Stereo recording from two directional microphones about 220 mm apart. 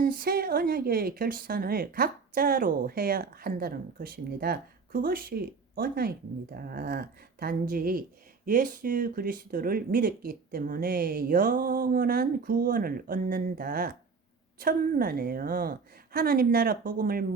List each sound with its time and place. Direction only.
0.0 s a woman's voice: 40° right (ahead or behind)